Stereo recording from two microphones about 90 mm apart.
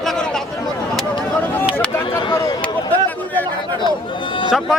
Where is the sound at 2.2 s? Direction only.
65° left (ahead or behind).